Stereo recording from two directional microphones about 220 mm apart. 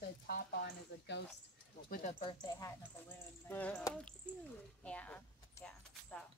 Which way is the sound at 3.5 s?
5° left (ahead or behind).